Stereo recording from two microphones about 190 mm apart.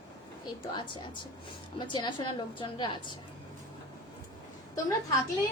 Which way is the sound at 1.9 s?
25° left (ahead or behind).